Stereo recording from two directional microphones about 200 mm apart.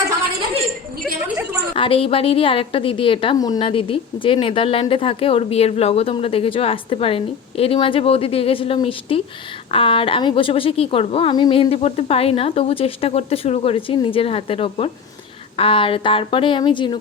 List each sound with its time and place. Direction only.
1.7 s a woman's voice: 25° left (ahead or behind)